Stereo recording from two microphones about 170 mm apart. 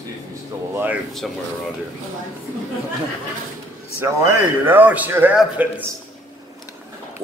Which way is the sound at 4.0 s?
15° right (ahead or behind).